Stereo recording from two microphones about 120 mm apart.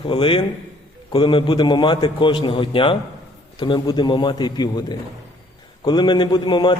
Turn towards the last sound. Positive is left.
turn(degrees=40)  # may be behind; listen again after turning